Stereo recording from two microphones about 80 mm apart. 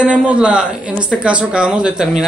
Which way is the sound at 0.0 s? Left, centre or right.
Centre.